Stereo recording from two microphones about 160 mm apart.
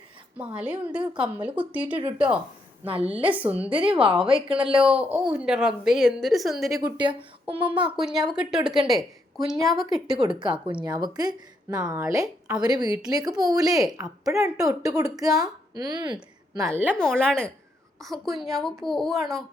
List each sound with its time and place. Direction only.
0.3 s a woman's voice: 5° right (ahead or behind)
2.8 s speech: 35° right (ahead or behind)
3.2 s a woman's voice: 10° right (ahead or behind)
3.8 s speech: 35° right (ahead or behind)
4.1 s a woman's voice: 5° right (ahead or behind)
6.7 s a woman's voice: 25° right (ahead or behind)
7.9 s a woman's voice: 5° right (ahead or behind)
10.2 s a woman's voice: 30° right (ahead or behind)
16.6 s a woman's voice: 15° right (ahead or behind)
16.9 s a woman's voice: 5° left (ahead or behind)